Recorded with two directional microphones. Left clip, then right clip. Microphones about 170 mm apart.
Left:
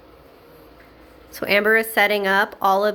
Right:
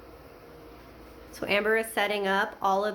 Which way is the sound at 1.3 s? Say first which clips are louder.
Left 8 dB; 35° left (ahead or behind).